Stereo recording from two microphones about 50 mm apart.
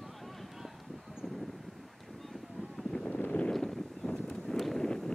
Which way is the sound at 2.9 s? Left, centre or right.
Centre.